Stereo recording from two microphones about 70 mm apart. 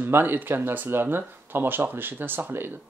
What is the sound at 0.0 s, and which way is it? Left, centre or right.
Speech, right.